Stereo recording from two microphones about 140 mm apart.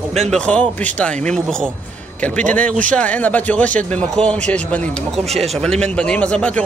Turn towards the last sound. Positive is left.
turn(degrees=10)  # may be behind; listen again after turning